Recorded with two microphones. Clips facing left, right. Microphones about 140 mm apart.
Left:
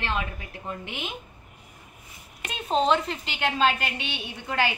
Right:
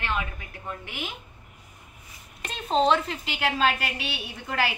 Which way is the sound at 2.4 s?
5° left (ahead or behind).